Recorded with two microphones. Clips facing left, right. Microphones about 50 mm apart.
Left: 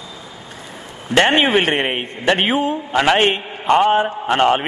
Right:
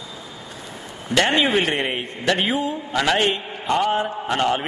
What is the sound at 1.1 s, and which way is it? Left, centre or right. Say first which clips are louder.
A man's voice: left 4 dB; left.